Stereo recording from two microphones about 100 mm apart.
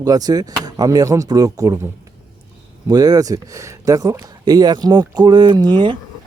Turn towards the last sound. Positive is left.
turn(degrees=-50)  # may be behind; listen again after turning